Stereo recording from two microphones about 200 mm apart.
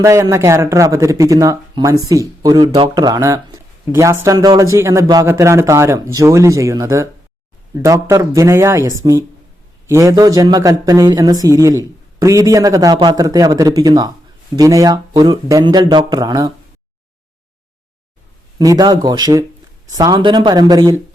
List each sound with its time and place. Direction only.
0.0 s speech: 15° right (ahead or behind)
18.6 s speech: 20° right (ahead or behind)